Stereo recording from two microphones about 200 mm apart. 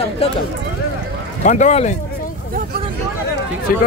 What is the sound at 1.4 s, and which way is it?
Speech, 35° left (ahead or behind).